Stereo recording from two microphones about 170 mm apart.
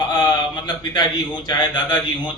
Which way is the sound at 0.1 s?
25° left (ahead or behind).